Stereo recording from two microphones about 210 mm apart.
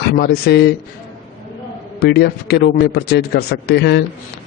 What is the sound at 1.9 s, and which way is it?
A man's voice, 50° left (ahead or behind).